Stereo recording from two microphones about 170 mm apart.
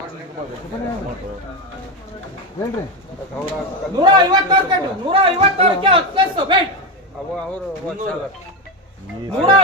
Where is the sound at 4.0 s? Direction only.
25° right (ahead or behind).